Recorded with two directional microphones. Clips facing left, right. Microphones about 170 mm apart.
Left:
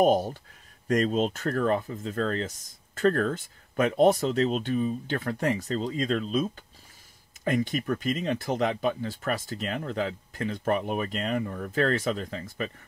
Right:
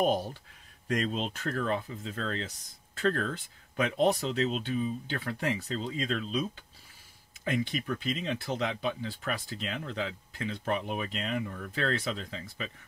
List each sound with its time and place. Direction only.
0.0 s speech: 45° left (ahead or behind)